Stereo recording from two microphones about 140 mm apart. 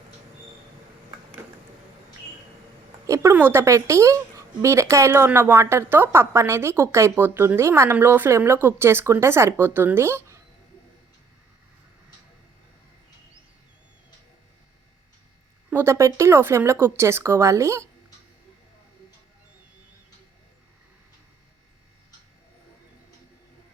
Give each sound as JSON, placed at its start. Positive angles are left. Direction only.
{"t": 3.1, "sound": "a woman's voice", "side_deg": -20}
{"t": 15.7, "sound": "a woman's voice", "side_deg": -20}